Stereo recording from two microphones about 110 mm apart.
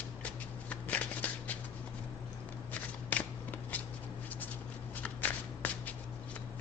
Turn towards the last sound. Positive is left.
turn(degrees=15)  # may be behind; listen again after turning